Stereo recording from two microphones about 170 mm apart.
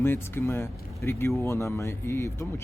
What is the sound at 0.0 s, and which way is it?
Speech, 15° left (ahead or behind).